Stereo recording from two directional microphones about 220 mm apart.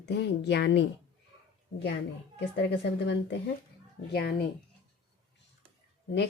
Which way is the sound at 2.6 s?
55° left (ahead or behind).